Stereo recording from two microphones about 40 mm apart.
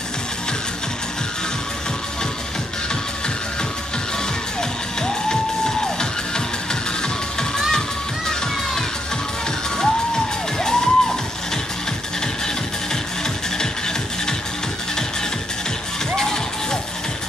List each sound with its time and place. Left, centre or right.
4.6 s music: centre
9.8 s music: centre
13.6 s music: centre